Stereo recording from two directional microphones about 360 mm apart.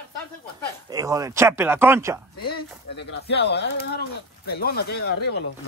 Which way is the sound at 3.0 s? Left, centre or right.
Left.